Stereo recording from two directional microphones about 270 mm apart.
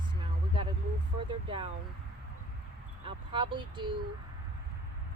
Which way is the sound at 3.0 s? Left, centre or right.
Centre.